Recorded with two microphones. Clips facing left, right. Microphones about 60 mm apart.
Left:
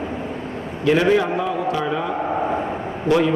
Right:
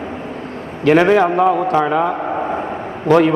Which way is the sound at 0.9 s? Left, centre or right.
Right.